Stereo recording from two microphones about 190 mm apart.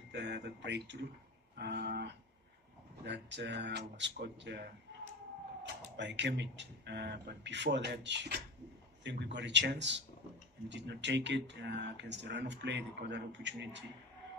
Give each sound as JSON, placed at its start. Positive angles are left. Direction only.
{"t": 0.1, "sound": "speech", "side_deg": -65}
{"t": 5.9, "sound": "speech", "side_deg": -65}